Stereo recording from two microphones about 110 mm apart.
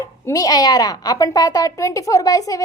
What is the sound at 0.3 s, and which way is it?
A child's voice, 35° left (ahead or behind).